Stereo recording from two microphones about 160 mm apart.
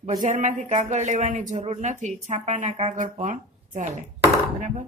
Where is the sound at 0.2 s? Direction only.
50° right (ahead or behind).